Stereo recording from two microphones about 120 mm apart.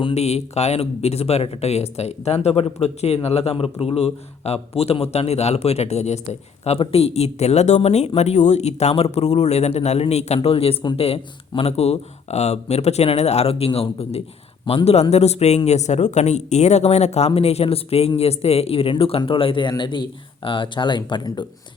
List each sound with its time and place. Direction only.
0.1 s speech: 65° left (ahead or behind)
6.7 s speech: 55° left (ahead or behind); by 21.4 s 40° left (ahead or behind)